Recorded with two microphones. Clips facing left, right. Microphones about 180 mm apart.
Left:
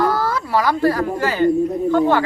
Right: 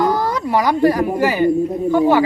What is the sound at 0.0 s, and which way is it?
Speech, 15° right (ahead or behind).